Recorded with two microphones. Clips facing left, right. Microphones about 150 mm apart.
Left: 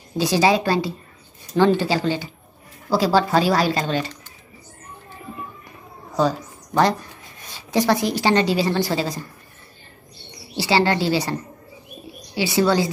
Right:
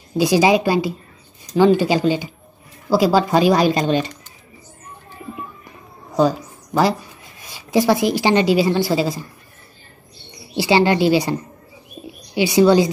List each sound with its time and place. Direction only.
0.2 s speech: 15° right (ahead or behind)
6.1 s speech: 10° right (ahead or behind)
10.5 s speech: 15° right (ahead or behind)
12.4 s speech: 15° right (ahead or behind)